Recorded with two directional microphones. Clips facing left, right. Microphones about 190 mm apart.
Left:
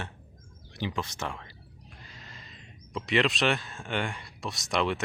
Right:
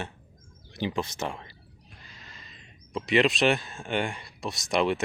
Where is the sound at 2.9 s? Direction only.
10° right (ahead or behind).